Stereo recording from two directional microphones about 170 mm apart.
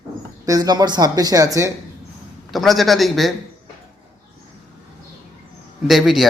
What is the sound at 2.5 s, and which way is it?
Speech, centre (ahead or behind).